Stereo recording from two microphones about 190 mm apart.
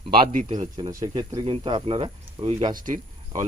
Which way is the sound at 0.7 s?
20° right (ahead or behind).